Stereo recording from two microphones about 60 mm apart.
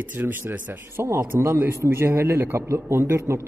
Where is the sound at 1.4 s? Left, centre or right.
Right.